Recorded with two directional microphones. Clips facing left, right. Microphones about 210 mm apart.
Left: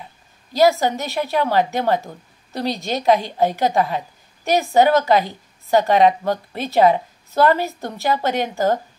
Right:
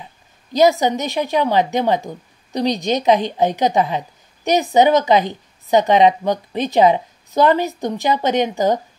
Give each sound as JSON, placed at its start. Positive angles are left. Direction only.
{"t": 0.5, "sound": "a woman's voice", "side_deg": -20}